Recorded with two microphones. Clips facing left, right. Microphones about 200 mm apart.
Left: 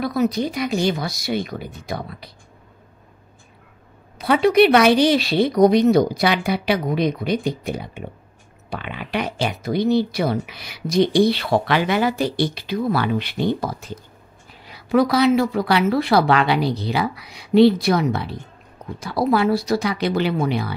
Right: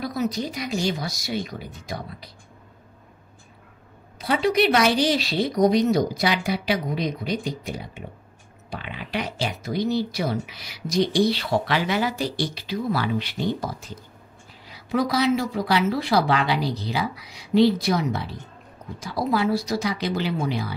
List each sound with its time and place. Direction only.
0.0 s speech: 60° left (ahead or behind)
4.2 s speech: 60° left (ahead or behind)